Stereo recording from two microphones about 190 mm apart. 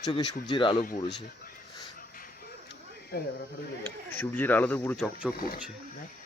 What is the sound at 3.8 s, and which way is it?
Speech, 10° left (ahead or behind).